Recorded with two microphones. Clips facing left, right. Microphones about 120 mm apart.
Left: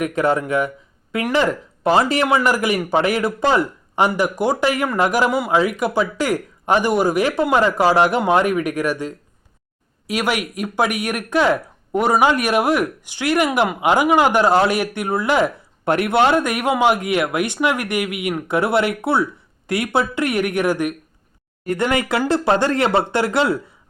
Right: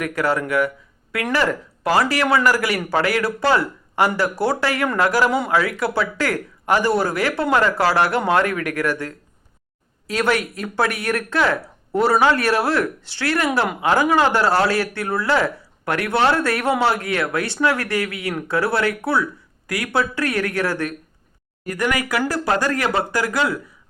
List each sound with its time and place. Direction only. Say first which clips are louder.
0.0 s speech: left 3 dB; 20° left (ahead or behind)